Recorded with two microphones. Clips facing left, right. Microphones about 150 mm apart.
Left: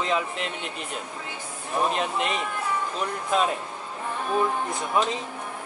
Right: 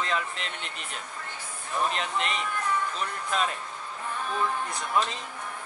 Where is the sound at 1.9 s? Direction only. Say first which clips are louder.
Left 4 dB; 5° left (ahead or behind); by 5.0 s 20° left (ahead or behind).